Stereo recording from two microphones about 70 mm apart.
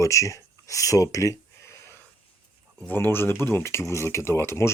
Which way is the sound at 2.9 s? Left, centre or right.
Left.